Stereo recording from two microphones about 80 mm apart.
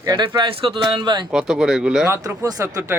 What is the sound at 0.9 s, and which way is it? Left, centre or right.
Speech, right.